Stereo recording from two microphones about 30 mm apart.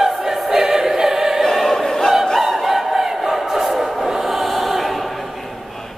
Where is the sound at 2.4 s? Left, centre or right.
Centre.